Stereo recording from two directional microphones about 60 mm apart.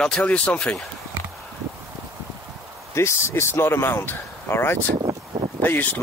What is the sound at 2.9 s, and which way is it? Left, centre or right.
Speech, left.